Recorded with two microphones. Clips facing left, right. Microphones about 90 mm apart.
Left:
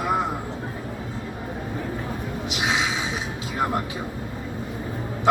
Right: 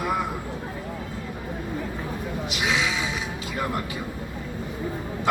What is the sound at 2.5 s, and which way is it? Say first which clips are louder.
Speech: left 1 dB; 30° left (ahead or behind).